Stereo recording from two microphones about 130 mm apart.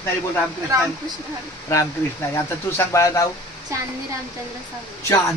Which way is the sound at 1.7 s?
20° left (ahead or behind).